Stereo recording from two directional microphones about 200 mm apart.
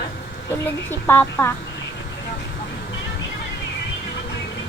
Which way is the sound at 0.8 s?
10° left (ahead or behind).